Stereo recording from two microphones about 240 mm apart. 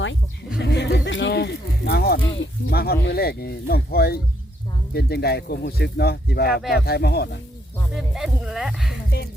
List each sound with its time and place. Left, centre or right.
0.6 s speech: left
7.9 s speech: centre
9.0 s music: left